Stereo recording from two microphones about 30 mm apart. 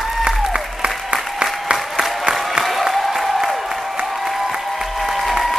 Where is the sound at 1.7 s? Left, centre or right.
Centre.